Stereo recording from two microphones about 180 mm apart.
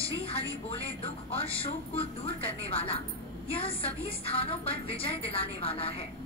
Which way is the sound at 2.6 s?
30° left (ahead or behind).